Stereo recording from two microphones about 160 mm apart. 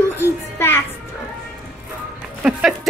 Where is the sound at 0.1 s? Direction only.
15° left (ahead or behind).